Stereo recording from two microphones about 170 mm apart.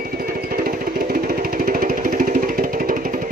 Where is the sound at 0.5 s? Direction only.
60° right (ahead or behind).